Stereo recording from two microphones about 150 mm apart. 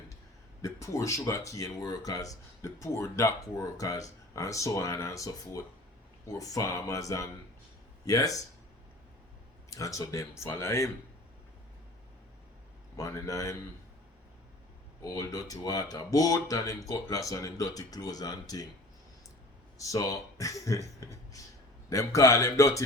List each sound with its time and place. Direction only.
0.6 s speech: 20° left (ahead or behind)
9.6 s speech: 20° left (ahead or behind)
13.0 s speech: 20° left (ahead or behind)
15.1 s speech: 20° left (ahead or behind)
19.8 s speech: 20° left (ahead or behind)